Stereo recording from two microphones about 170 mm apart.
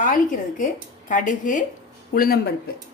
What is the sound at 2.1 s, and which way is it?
Speech, 65° left (ahead or behind).